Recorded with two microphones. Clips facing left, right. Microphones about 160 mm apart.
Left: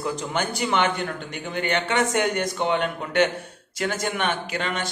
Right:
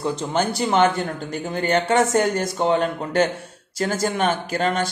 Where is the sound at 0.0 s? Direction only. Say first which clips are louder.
Right 4 dB; 30° right (ahead or behind).